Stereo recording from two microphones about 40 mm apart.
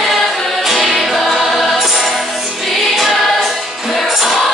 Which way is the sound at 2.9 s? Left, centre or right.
Centre.